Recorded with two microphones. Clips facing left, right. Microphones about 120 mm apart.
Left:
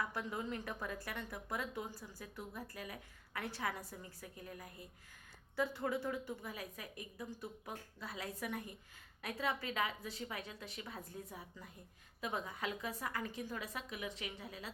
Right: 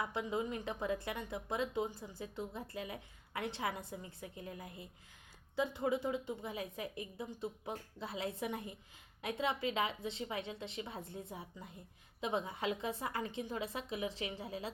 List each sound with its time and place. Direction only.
0.0 s a woman's voice: 20° right (ahead or behind)